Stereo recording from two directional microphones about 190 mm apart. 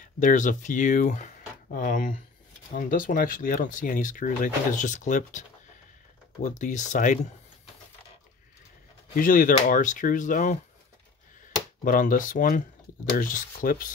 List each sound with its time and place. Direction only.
0.0 s speech: 45° left (ahead or behind)
6.4 s speech: 40° left (ahead or behind)
9.1 s speech: 45° left (ahead or behind)
11.8 s speech: 45° left (ahead or behind)